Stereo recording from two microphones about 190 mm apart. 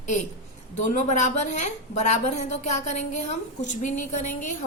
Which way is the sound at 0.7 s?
40° left (ahead or behind).